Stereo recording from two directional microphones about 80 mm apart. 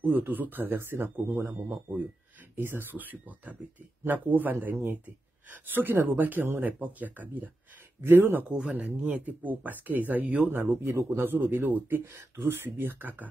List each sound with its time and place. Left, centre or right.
0.0 s speech: right